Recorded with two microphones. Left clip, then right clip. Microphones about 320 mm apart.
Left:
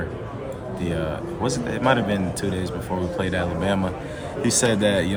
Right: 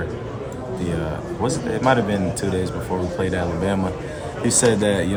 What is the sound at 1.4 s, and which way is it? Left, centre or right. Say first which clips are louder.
A man's voice: right 2 dB; centre.